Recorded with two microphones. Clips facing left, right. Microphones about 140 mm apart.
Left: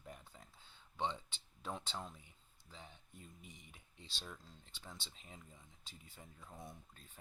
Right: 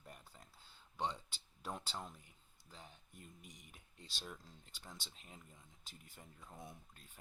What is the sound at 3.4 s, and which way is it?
Speech, 45° right (ahead or behind).